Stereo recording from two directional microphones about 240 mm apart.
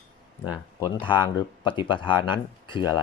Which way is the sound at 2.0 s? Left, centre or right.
Centre.